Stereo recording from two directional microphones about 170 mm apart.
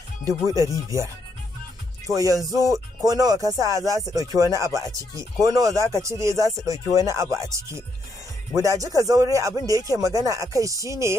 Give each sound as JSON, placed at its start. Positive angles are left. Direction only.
{"t": 0.8, "sound": "speech", "side_deg": -20}